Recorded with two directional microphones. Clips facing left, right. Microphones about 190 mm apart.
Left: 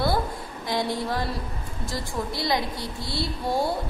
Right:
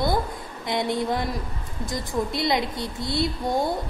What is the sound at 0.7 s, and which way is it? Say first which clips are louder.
A woman's voice: right 2 dB; 20° right (ahead or behind).